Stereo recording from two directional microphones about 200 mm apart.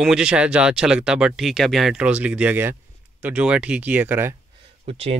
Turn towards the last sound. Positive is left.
turn(degrees=-30)  # may be behind; listen again after turning